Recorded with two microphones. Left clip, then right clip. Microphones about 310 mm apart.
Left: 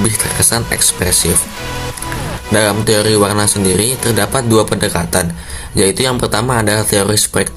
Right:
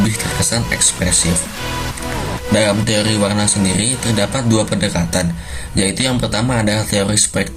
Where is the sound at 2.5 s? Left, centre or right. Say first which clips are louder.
Left 3 dB; left.